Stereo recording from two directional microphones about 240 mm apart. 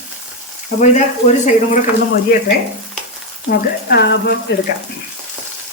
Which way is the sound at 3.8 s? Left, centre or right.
Left.